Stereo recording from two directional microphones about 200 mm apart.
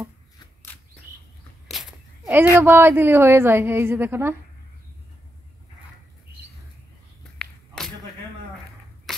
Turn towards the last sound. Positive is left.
turn(degrees=5)  # may be behind; listen again after turning